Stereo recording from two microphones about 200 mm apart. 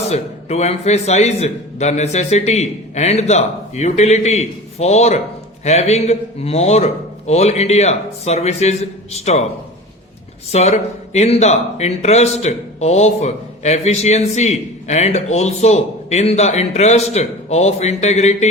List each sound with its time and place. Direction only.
0.0 s speech: 35° left (ahead or behind)
10.5 s speech: 35° left (ahead or behind)